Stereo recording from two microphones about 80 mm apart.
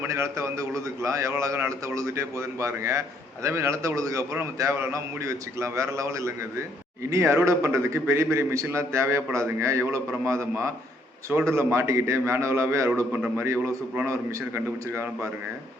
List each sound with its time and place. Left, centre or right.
0.1 s a man's voice: right